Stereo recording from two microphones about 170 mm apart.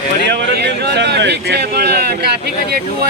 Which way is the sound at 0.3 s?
90° right.